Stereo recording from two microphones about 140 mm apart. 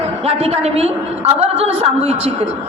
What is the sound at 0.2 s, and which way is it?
A woman's voice, 45° right (ahead or behind).